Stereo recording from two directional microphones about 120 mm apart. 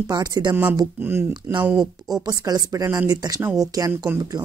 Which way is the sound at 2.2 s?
30° right (ahead or behind).